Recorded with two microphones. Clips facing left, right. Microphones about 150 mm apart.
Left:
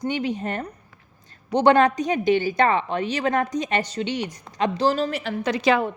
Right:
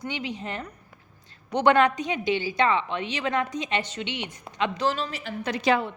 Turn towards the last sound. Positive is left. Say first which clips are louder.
# left 3 dB
turn(degrees=90)